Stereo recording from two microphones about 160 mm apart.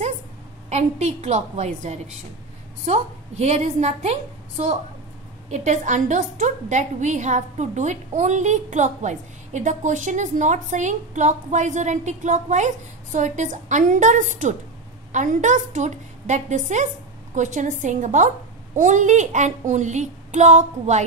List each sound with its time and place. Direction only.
0.7 s a woman's voice: 45° right (ahead or behind)